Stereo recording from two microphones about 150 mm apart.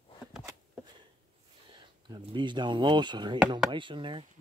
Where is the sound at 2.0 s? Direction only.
30° right (ahead or behind).